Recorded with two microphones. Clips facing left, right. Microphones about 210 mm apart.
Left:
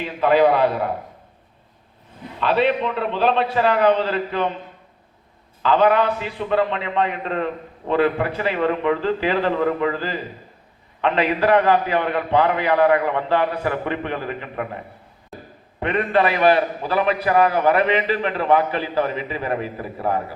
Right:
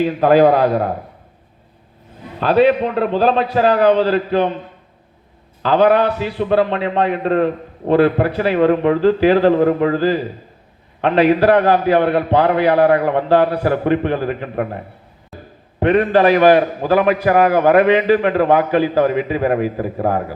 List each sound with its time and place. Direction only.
0.0 s a man's voice: 40° right (ahead or behind)
2.4 s a man's voice: 40° right (ahead or behind)
5.6 s a man's voice: 40° right (ahead or behind)
11.1 s a man's voice: 40° right (ahead or behind)
15.8 s a man's voice: 70° right (ahead or behind)
16.3 s a man's voice: 45° right (ahead or behind)